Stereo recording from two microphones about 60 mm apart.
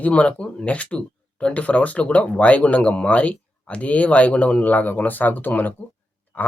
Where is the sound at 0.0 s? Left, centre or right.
Left.